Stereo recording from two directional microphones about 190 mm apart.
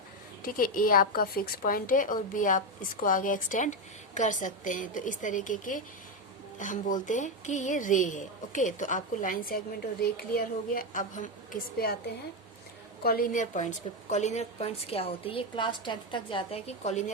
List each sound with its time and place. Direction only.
0.4 s a woman's voice: 50° left (ahead or behind)
13.0 s a woman's voice: 50° left (ahead or behind)